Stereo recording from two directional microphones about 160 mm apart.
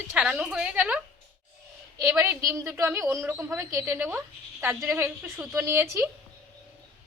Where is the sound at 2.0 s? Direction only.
15° right (ahead or behind).